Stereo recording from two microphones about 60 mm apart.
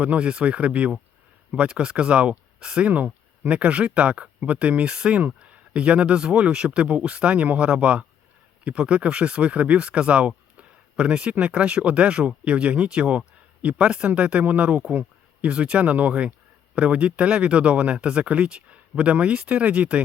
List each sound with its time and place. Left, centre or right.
0.0 s speech: centre
2.9 s speech: right